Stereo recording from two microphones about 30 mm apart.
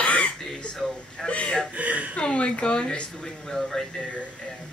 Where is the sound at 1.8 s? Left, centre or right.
Right.